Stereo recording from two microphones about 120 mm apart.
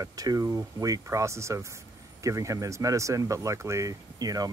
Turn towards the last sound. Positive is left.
turn(degrees=-30)  # may be behind; listen again after turning